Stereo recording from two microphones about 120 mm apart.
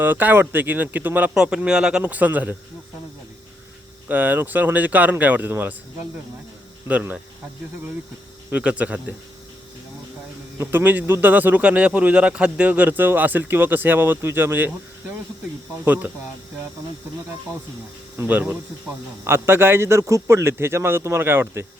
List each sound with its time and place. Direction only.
0.0 s speech: 15° right (ahead or behind)
4.1 s speech: 15° right (ahead or behind)
6.8 s speech: 15° right (ahead or behind)
8.4 s speech: 10° right (ahead or behind)
10.6 s speech: 15° right (ahead or behind)
15.8 s speech: 15° right (ahead or behind)
18.2 s a man's voice: 15° right (ahead or behind)